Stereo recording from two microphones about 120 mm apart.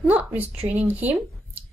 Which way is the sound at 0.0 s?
15° right (ahead or behind).